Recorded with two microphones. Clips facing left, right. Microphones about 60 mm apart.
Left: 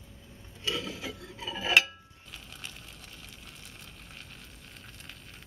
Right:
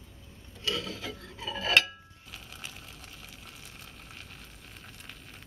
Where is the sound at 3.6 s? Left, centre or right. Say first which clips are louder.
Right 1 dB; centre.